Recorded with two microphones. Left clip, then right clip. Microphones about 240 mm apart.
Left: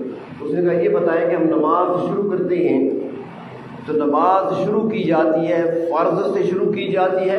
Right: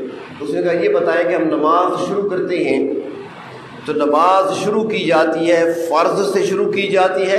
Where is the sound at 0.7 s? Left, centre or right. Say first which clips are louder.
Right 2 dB; right.